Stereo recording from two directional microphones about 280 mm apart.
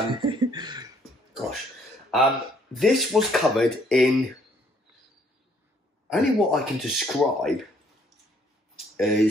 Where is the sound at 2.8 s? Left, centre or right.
Centre.